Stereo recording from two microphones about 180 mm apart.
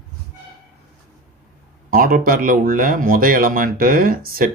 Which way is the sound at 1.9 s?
50° right (ahead or behind).